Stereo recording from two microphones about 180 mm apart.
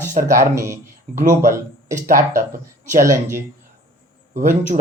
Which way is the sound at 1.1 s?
45° right (ahead or behind).